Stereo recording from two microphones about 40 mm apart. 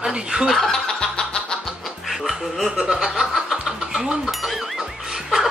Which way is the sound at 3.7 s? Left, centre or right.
Centre.